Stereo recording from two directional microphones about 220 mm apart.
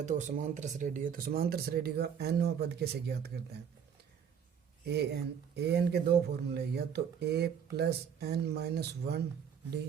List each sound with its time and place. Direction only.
0.0 s speech: 35° right (ahead or behind)
4.9 s speech: 50° right (ahead or behind)